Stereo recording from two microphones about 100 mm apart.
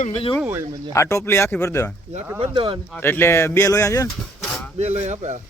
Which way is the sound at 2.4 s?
60° right (ahead or behind).